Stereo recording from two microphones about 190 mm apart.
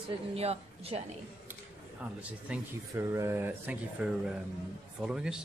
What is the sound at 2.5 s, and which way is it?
Speech, 10° right (ahead or behind).